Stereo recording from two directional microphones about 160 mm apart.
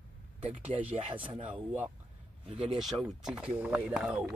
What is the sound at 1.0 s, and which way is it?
Speech, 35° right (ahead or behind).